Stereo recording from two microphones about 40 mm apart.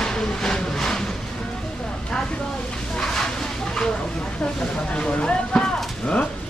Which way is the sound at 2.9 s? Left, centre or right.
Centre.